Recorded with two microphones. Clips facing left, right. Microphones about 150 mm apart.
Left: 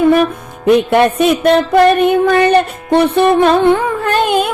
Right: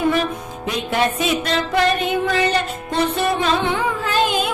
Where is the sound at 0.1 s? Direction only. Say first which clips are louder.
Left 9 dB; 55° left (ahead or behind).